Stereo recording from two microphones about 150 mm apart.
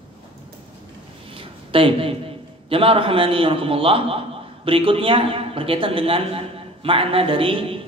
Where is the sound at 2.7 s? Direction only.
40° right (ahead or behind).